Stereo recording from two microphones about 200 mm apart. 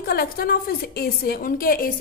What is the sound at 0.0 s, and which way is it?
A woman's voice, 50° left (ahead or behind).